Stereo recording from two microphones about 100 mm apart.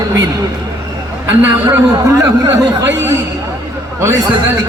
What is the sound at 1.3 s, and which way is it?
Speech, 20° right (ahead or behind).